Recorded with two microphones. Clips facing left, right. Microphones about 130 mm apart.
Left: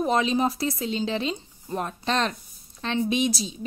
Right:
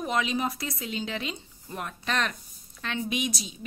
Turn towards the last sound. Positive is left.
turn(degrees=30)  # may be behind; listen again after turning